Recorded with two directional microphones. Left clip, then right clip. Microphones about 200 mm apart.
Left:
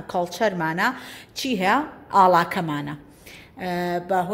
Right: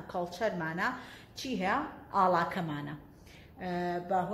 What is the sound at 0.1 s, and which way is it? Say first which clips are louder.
A woman's voice: left 10 dB; 45° left (ahead or behind).